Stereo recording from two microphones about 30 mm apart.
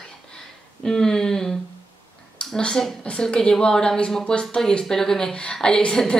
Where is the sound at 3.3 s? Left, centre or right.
Left.